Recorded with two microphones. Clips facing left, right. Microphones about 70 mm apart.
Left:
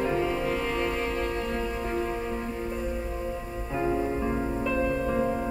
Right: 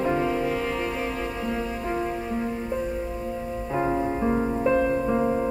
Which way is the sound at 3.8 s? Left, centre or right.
Right.